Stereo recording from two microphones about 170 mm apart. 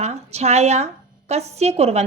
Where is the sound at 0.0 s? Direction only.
40° right (ahead or behind).